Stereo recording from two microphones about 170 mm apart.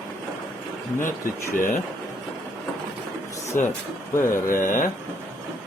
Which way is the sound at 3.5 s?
15° left (ahead or behind).